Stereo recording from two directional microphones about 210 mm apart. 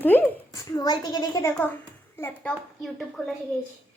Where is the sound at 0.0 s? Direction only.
10° left (ahead or behind).